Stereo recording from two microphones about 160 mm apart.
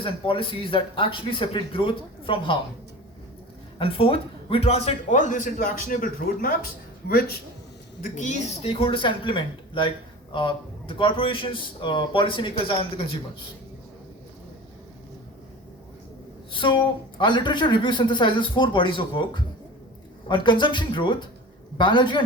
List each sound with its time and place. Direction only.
0.0 s a man's voice: 35° left (ahead or behind)
3.8 s a man's voice: 35° left (ahead or behind); by 7.3 s 70° left (ahead or behind)
8.0 s a man's voice: 50° left (ahead or behind); by 13.1 s 35° left (ahead or behind)
16.5 s a man's voice: 30° left (ahead or behind)